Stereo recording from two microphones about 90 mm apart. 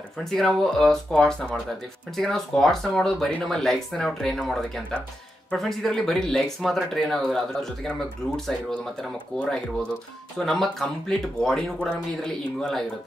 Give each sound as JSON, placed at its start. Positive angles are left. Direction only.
{"t": 0.2, "sound": "speech", "side_deg": 5}